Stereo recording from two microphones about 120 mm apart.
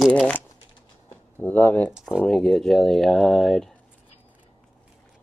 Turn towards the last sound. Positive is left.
turn(degrees=5)  # may be behind; listen again after turning